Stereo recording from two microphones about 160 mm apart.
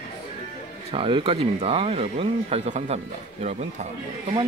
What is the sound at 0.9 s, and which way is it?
Speech, 35° right (ahead or behind).